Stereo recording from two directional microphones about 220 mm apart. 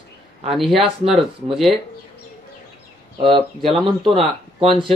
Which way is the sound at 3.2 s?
20° right (ahead or behind).